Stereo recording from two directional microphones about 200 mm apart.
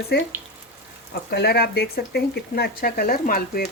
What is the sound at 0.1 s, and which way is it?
Speech, 55° left (ahead or behind).